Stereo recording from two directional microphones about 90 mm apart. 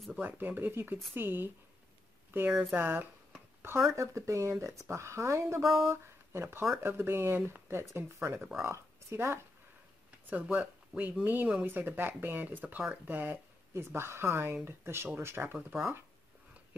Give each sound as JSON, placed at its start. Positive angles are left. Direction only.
{"t": 0.2, "sound": "speech", "side_deg": -20}
{"t": 3.9, "sound": "speech", "side_deg": -35}
{"t": 5.6, "sound": "speech", "side_deg": 0}
{"t": 5.9, "sound": "speech", "side_deg": -30}
{"t": 10.3, "sound": "speech", "side_deg": -15}